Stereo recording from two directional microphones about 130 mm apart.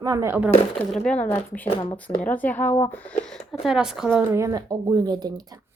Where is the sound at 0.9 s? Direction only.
5° left (ahead or behind).